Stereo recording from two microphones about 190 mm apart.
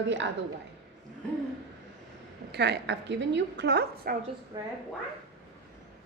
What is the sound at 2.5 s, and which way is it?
A woman's voice, 60° right (ahead or behind).